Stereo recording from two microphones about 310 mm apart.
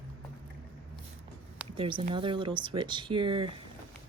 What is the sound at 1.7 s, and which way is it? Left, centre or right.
Speech, centre.